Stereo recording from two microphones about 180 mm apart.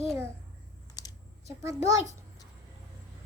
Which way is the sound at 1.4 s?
20° right (ahead or behind).